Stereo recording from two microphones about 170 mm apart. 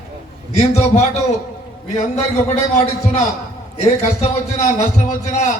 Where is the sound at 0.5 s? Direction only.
40° left (ahead or behind).